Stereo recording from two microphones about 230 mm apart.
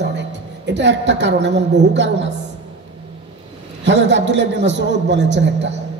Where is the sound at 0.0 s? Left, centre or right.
Right.